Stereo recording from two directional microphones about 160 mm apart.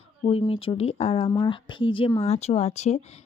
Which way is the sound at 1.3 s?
25° left (ahead or behind).